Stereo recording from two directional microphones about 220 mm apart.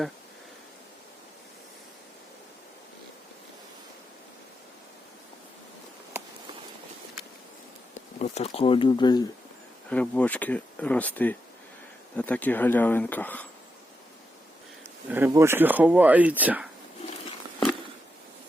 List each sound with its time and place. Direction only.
7.9 s speech: 30° left (ahead or behind)
9.9 s speech: 5° left (ahead or behind)
15.1 s speech: 10° right (ahead or behind)